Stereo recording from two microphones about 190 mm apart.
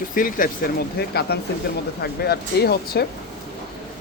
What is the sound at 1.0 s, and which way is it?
Speech, 55° left (ahead or behind).